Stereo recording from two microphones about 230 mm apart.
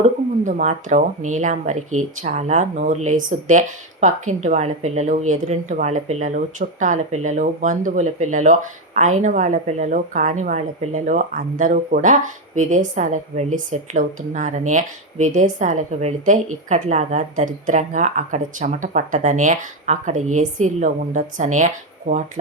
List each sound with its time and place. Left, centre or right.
0.4 s speech: right